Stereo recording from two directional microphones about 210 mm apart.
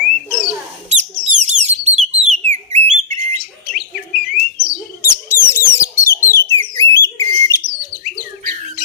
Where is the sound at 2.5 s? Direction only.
35° right (ahead or behind).